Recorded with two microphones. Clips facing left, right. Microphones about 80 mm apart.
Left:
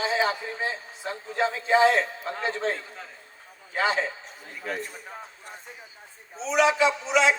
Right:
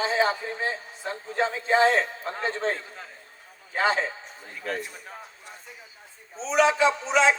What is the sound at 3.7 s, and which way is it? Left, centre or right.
Speech, right.